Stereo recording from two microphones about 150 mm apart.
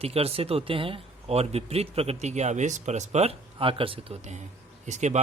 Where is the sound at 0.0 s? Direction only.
40° right (ahead or behind).